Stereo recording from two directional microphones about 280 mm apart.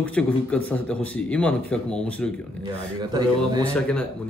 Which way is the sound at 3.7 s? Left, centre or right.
Centre.